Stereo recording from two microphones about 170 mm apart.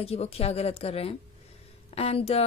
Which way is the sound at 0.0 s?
35° left (ahead or behind).